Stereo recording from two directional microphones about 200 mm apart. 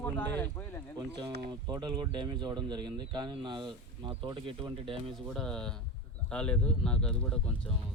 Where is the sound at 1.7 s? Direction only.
20° right (ahead or behind).